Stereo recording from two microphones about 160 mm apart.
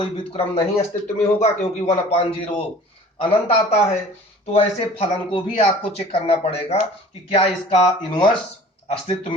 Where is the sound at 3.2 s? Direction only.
40° left (ahead or behind).